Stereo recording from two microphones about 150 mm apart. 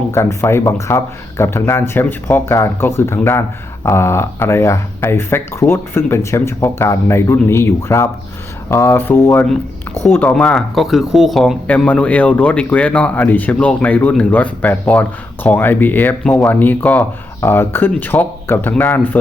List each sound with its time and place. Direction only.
0.1 s speech: 20° left (ahead or behind)